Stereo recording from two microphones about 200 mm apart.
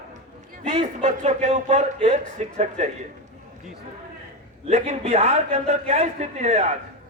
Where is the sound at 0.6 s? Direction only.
30° right (ahead or behind).